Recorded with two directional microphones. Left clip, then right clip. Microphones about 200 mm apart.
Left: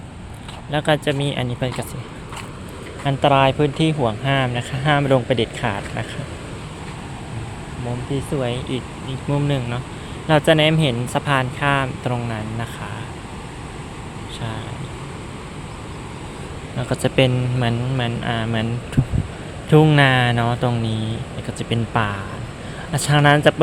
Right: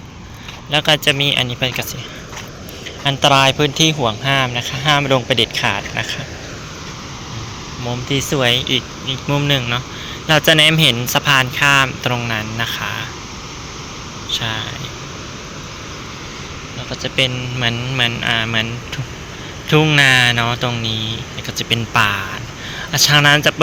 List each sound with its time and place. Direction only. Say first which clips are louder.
0.7 s speech: right 5 dB; 10° left (ahead or behind)
3.0 s speech: right 3 dB; 10° left (ahead or behind)
8.1 s speech: right 9 dB; 10° right (ahead or behind)
14.3 s speech: right 11 dB; centre (ahead or behind)
16.9 s speech: even; 40° left (ahead or behind)
17.6 s speech: right 9 dB; 20° left (ahead or behind)
19.7 s speech: right 3 dB; 20° left (ahead or behind)